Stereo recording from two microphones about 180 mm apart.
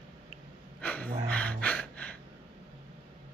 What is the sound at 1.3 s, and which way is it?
Gasp, 5° left (ahead or behind).